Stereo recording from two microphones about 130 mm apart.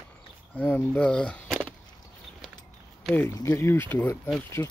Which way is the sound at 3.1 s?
20° left (ahead or behind).